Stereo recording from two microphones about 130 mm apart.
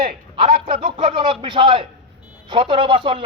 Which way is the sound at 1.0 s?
40° right (ahead or behind).